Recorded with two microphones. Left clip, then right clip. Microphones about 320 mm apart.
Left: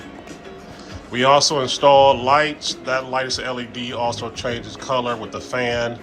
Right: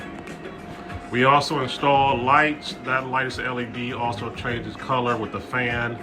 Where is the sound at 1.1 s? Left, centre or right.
Centre.